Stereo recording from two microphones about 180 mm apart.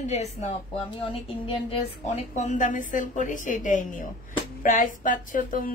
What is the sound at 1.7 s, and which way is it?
A woman's voice, 40° left (ahead or behind).